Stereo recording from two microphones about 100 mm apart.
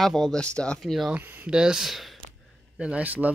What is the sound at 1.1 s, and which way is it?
Speech, 20° right (ahead or behind).